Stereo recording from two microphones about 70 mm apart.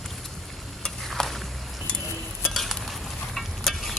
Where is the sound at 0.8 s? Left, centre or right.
Centre.